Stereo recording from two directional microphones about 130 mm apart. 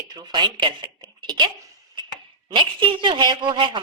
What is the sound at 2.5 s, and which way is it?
A woman's voice, 40° right (ahead or behind).